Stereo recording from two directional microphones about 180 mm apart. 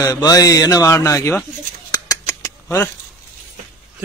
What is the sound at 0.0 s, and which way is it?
Speech, 20° left (ahead or behind).